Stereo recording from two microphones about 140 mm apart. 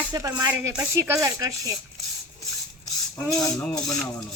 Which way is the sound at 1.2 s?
25° right (ahead or behind).